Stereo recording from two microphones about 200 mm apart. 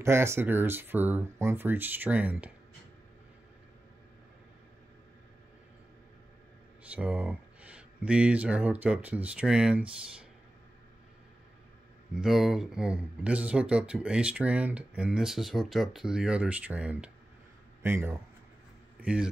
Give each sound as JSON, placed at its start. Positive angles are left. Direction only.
{"t": 0.0, "sound": "speech", "side_deg": -15}
{"t": 6.9, "sound": "speech", "side_deg": -5}
{"t": 12.1, "sound": "speech", "side_deg": 0}